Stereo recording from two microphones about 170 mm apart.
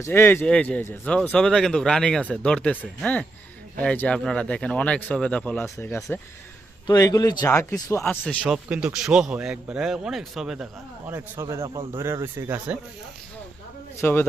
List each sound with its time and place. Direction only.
0.0 s a man's voice: 15° left (ahead or behind)
8.3 s a man's voice: 5° right (ahead or behind)
11.6 s speech: 30° right (ahead or behind)
11.9 s speech: 15° right (ahead or behind)
14.0 s speech: 15° left (ahead or behind)